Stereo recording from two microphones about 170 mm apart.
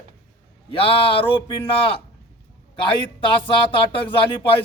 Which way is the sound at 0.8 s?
30° left (ahead or behind).